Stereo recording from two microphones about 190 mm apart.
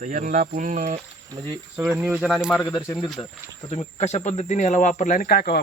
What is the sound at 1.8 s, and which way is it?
Speech, 10° right (ahead or behind).